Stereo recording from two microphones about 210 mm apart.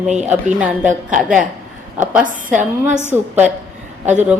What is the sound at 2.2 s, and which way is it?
Speech, 35° right (ahead or behind).